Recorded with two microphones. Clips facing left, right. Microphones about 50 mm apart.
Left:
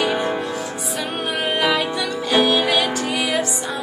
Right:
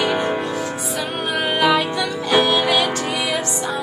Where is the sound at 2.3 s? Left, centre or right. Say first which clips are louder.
Even; centre.